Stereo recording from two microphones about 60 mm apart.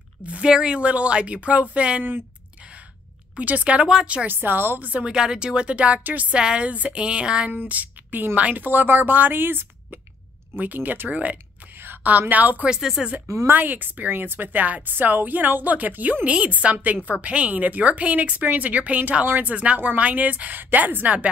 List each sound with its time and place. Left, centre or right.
0.2 s a woman's voice: right
3.3 s speech: right
4.3 s a woman's voice: right
5.1 s speech: centre
7.6 s a woman's voice: right
11.7 s a sound: right
12.6 s speech: centre
13.5 s a woman's voice: right